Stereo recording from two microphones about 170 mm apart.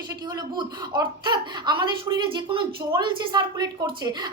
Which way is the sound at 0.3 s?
25° right (ahead or behind).